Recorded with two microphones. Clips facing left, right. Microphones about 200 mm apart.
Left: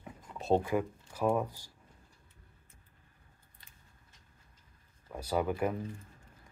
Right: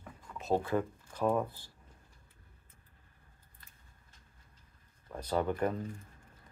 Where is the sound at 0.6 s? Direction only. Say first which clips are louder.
Left 1 dB; 10° left (ahead or behind).